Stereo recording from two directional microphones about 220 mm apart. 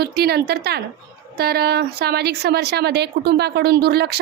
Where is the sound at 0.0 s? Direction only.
45° right (ahead or behind).